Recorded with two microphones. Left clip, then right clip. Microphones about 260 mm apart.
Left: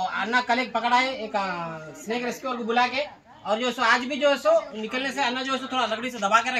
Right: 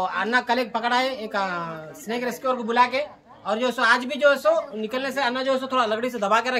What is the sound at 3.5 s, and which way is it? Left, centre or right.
A man's voice, centre.